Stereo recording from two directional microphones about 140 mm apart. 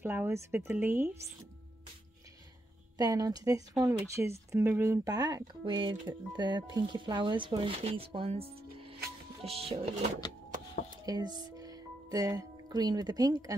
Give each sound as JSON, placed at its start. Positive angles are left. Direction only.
{"t": 0.0, "sound": "speech", "side_deg": -15}
{"t": 3.0, "sound": "speech", "side_deg": -30}
{"t": 11.1, "sound": "speech", "side_deg": -30}